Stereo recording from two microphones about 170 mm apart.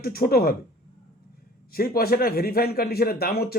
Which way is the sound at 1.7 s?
65° left (ahead or behind).